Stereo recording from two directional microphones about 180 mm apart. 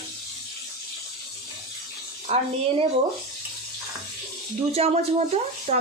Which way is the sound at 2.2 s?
35° right (ahead or behind).